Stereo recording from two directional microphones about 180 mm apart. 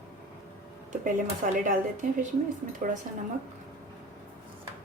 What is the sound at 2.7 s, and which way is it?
Speech, 45° right (ahead or behind).